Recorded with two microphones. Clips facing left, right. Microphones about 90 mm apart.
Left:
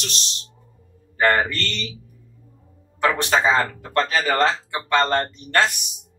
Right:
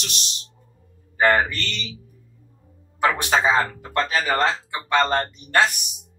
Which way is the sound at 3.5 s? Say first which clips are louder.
Left 1 dB; 10° right (ahead or behind).